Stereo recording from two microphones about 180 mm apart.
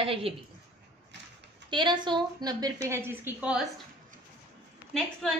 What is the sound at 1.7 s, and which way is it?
A woman's voice, 25° right (ahead or behind).